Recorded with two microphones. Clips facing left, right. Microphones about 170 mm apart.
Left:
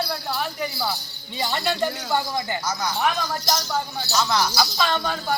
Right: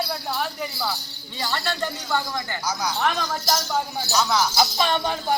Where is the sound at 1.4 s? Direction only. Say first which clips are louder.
Left 3 dB; 15° left (ahead or behind).